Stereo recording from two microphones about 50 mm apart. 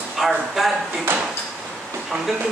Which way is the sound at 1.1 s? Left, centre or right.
Right.